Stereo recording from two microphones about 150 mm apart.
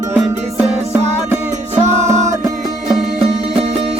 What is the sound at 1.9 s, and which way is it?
Music, 50° right (ahead or behind).